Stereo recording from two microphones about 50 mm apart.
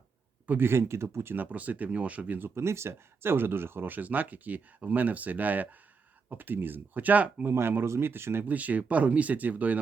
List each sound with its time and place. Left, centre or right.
0.6 s speech: right
1.3 s speech: right
2.6 s speech: right
7.5 s speech: right
8.4 s speech: right